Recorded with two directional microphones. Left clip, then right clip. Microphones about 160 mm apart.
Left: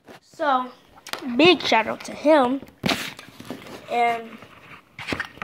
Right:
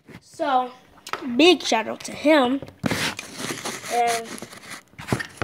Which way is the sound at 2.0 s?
Centre (ahead or behind).